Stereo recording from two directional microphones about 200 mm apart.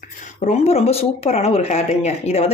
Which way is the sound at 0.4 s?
30° left (ahead or behind).